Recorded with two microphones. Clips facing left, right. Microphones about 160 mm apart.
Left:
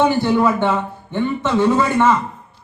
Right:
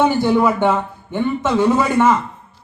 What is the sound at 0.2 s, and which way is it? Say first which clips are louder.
A man's voice: right 1 dB; 15° right (ahead or behind).